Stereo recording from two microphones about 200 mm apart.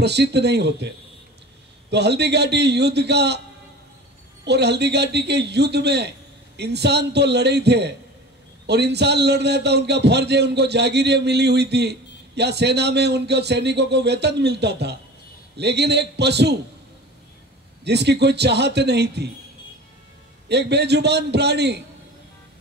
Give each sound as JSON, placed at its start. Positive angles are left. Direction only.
{"t": 0.0, "sound": "a man's voice", "side_deg": -55}
{"t": 4.5, "sound": "a man's voice", "side_deg": -55}
{"t": 17.8, "sound": "a man's voice", "side_deg": -55}
{"t": 20.4, "sound": "a man's voice", "side_deg": -55}